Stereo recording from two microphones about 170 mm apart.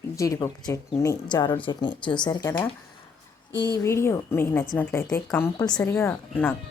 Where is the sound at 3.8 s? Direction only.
15° left (ahead or behind).